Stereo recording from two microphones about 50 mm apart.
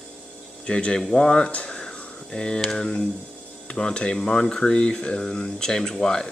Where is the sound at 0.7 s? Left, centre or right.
Left.